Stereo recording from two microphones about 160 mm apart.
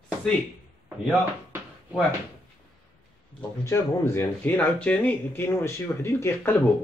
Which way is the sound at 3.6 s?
15° left (ahead or behind).